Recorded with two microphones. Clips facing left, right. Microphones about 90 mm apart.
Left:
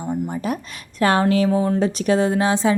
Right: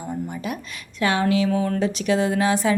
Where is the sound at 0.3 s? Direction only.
40° left (ahead or behind).